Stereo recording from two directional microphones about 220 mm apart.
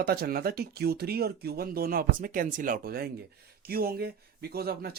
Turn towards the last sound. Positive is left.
turn(degrees=-45)  # may be behind; listen again after turning